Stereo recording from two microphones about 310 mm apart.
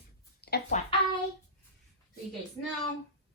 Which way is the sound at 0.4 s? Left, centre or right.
Left.